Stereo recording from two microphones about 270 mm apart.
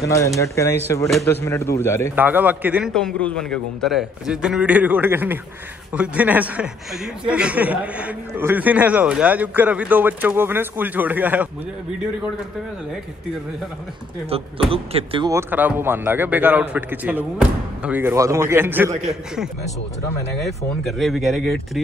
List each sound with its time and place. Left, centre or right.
0.0 s speech: centre
2.1 s a man's voice: centre
14.3 s a man's voice: right; by 21.8 s centre